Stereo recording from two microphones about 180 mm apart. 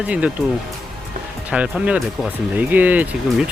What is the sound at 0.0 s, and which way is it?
Speech, 5° right (ahead or behind).